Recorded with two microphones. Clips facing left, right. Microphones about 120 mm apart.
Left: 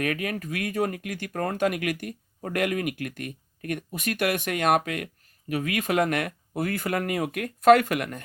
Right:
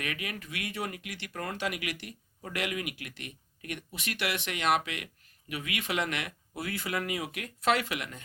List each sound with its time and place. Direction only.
0.0 s speech: 45° left (ahead or behind)